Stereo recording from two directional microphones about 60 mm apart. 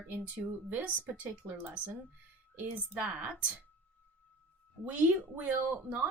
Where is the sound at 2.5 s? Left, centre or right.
Right.